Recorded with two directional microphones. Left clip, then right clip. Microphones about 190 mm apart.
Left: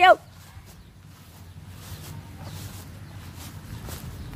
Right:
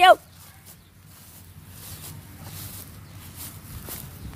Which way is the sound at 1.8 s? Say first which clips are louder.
Right 1 dB; 55° right (ahead or behind).